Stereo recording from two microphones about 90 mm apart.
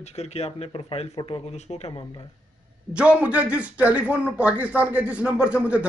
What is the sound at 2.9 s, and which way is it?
Speech, 15° right (ahead or behind).